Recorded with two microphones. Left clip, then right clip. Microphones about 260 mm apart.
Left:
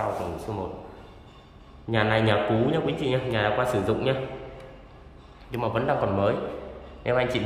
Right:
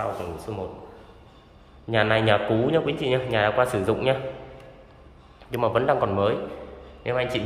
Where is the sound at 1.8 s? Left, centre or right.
Centre.